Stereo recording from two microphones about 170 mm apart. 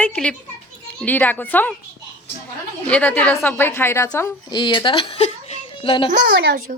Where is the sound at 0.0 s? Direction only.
5° left (ahead or behind).